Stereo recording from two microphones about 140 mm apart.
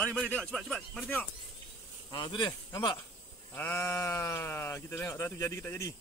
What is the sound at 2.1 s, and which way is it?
Speech, 35° left (ahead or behind).